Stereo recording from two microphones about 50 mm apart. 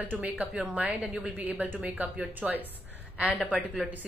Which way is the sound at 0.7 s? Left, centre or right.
Right.